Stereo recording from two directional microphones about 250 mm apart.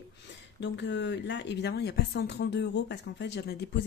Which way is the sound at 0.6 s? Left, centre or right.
Left.